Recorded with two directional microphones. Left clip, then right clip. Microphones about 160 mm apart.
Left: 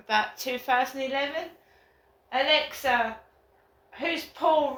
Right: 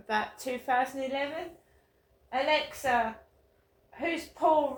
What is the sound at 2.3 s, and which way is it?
Speech, 30° right (ahead or behind).